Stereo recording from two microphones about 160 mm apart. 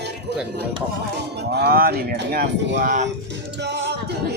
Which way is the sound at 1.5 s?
75° right (ahead or behind).